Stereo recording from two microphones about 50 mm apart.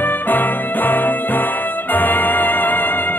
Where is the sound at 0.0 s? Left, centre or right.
Left.